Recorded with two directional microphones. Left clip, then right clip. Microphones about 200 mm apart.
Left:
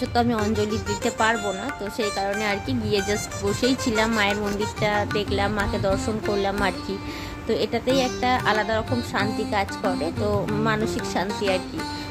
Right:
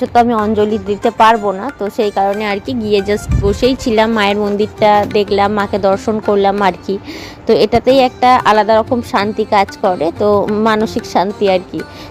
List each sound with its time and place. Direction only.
0.1 s speech: 15° right (ahead or behind)